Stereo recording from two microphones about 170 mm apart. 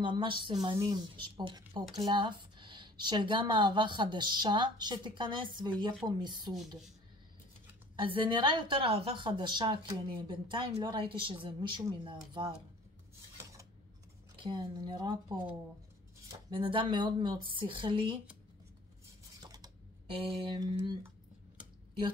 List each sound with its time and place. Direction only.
0.0 s a woman's voice: 30° right (ahead or behind)
7.9 s a woman's voice: 30° right (ahead or behind)
13.4 s scissors: 20° right (ahead or behind)
14.3 s a woman's voice: 30° right (ahead or behind)
16.3 s a woman's voice: 30° right (ahead or behind)
19.4 s a sound: 25° right (ahead or behind)
20.2 s a woman's voice: 25° right (ahead or behind)